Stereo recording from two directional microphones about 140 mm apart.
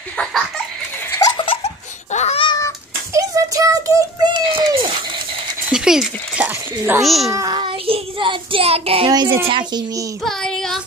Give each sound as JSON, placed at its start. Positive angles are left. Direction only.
{"t": 1.1, "sound": "laughter", "side_deg": 25}
{"t": 1.4, "sound": "laughter", "side_deg": 40}
{"t": 2.1, "sound": "cat", "side_deg": 50}
{"t": 3.1, "sound": "child singing", "side_deg": -25}
{"t": 4.5, "sound": "a sound", "side_deg": -35}
{"t": 5.7, "sound": "a child's voice", "side_deg": -5}
{"t": 7.2, "sound": "child singing", "side_deg": -25}
{"t": 9.1, "sound": "speech", "side_deg": -35}
{"t": 10.2, "sound": "child singing", "side_deg": 5}